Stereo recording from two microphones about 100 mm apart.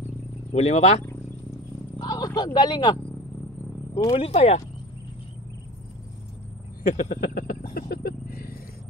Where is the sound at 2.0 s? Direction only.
40° left (ahead or behind).